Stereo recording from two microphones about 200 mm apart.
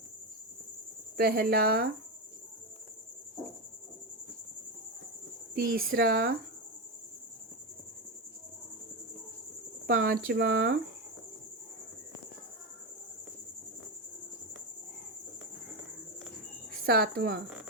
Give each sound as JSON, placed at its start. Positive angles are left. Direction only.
{"t": 1.1, "sound": "speech", "side_deg": -50}
{"t": 5.5, "sound": "speech", "side_deg": -50}
{"t": 9.8, "sound": "speech", "side_deg": -50}
{"t": 16.8, "sound": "speech", "side_deg": -50}